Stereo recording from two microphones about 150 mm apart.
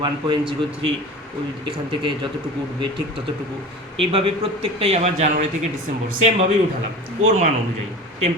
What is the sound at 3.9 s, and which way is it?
A man's voice, 40° right (ahead or behind).